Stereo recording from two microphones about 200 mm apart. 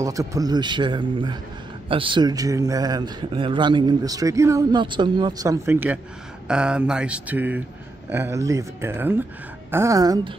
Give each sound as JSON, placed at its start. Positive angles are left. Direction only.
{"t": 0.0, "sound": "a man's voice", "side_deg": -15}